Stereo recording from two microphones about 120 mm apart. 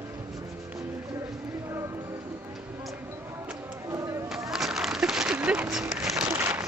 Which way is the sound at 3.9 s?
25° right (ahead or behind).